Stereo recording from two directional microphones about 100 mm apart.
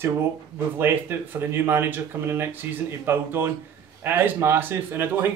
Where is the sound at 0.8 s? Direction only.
20° right (ahead or behind).